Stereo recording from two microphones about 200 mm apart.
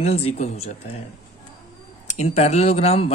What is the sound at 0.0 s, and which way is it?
Speech, 30° left (ahead or behind).